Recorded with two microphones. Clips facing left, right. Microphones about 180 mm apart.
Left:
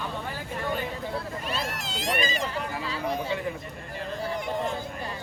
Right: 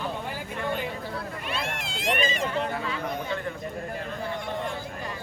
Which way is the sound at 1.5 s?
40° left (ahead or behind).